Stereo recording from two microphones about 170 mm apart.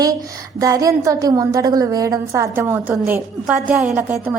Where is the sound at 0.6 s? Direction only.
20° right (ahead or behind).